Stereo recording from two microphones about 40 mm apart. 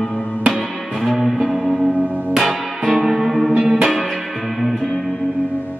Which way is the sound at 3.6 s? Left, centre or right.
Right.